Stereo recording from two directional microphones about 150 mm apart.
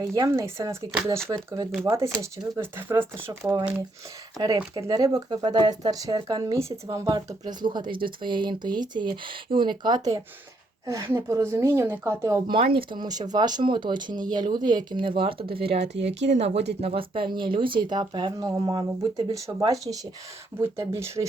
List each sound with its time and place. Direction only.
0.0 s speech: 20° right (ahead or behind)
1.8 s speech: 15° right (ahead or behind)
12.7 s speech: 30° right (ahead or behind)